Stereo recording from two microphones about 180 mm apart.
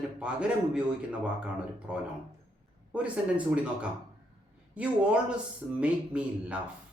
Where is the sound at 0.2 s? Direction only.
5° right (ahead or behind).